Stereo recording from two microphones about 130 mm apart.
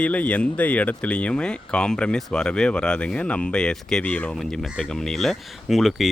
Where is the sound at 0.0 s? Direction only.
10° left (ahead or behind).